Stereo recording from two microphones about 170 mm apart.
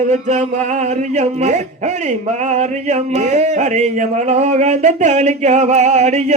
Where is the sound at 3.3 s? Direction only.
40° right (ahead or behind).